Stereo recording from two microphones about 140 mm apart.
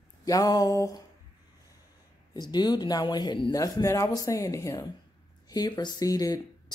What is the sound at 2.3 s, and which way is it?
Speech, 30° left (ahead or behind).